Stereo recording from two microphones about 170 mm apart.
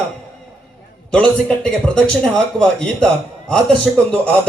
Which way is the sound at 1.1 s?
5° left (ahead or behind).